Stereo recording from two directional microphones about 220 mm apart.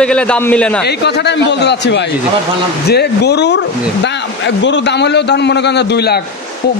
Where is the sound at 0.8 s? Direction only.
50° left (ahead or behind).